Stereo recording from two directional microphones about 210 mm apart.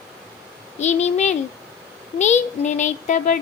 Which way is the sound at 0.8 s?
30° left (ahead or behind).